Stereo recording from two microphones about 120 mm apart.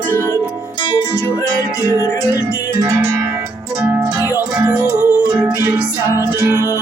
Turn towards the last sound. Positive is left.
turn(degrees=-20)  # may be behind; listen again after turning